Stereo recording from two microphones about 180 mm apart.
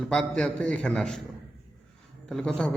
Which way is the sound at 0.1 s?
5° left (ahead or behind).